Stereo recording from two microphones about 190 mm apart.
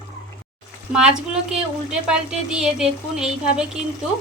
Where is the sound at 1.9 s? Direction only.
5° right (ahead or behind).